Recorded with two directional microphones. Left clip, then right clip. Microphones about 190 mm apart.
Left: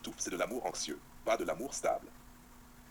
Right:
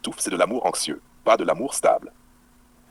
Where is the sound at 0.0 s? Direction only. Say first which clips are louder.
Right 14 dB; 45° right (ahead or behind).